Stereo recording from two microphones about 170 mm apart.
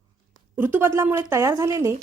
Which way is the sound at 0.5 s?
10° right (ahead or behind).